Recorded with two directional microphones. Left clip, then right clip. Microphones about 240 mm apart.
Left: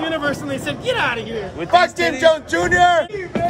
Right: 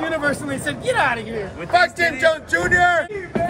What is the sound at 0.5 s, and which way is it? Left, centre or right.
Speech, centre.